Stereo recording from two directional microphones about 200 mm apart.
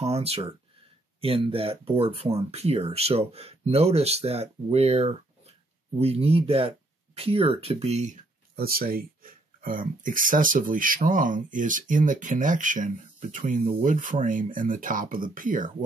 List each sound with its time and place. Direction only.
0.0 s speech: 30° right (ahead or behind)
8.5 s speech: 50° right (ahead or behind)